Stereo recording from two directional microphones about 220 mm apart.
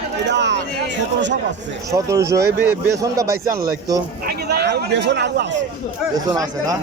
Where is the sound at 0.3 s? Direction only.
50° right (ahead or behind).